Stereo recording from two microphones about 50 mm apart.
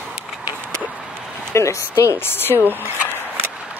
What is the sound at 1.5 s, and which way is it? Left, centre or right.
Speech, left.